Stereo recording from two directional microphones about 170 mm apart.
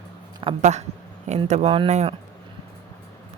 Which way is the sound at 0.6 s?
45° right (ahead or behind).